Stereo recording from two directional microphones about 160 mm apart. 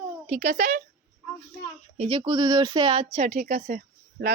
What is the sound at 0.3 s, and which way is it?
Speech, 50° right (ahead or behind).